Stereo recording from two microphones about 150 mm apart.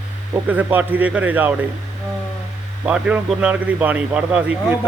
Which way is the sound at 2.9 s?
5° right (ahead or behind).